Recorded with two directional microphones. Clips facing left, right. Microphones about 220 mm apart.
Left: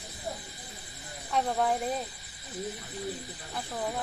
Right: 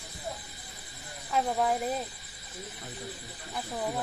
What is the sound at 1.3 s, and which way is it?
Speech, centre (ahead or behind).